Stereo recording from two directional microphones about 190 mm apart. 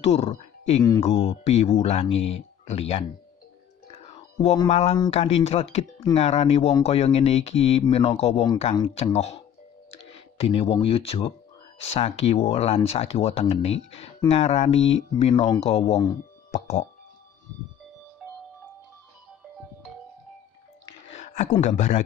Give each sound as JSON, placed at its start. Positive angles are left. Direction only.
{"t": 0.0, "sound": "speech", "side_deg": 35}
{"t": 3.9, "sound": "whispering", "side_deg": 35}
{"t": 4.6, "sound": "speech", "side_deg": 35}
{"t": 14.8, "sound": "speech", "side_deg": 80}
{"t": 15.1, "sound": "speech", "side_deg": 35}
{"t": 21.2, "sound": "speech", "side_deg": 40}